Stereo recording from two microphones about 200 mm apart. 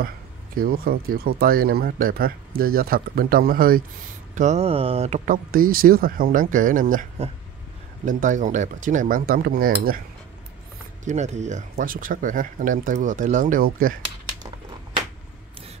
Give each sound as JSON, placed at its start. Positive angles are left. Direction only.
{"t": 0.6, "sound": "speech", "side_deg": -50}
{"t": 4.4, "sound": "speech", "side_deg": -35}
{"t": 11.1, "sound": "speech", "side_deg": -35}